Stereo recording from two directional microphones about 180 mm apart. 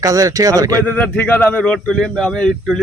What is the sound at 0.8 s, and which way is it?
Speech, 10° left (ahead or behind).